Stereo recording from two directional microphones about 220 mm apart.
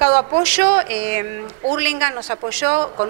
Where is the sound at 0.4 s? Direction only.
15° right (ahead or behind).